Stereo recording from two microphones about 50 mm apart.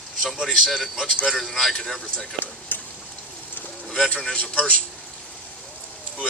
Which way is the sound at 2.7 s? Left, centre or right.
Left.